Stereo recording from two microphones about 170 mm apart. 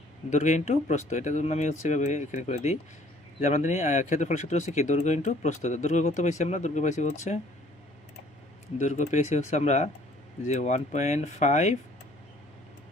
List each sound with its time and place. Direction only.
0.3 s speech: 45° left (ahead or behind)
8.8 s speech: 45° left (ahead or behind)